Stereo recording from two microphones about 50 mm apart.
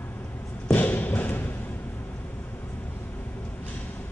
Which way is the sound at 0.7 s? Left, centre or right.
Left.